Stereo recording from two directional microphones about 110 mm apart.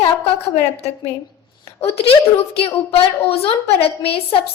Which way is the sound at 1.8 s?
65° left (ahead or behind).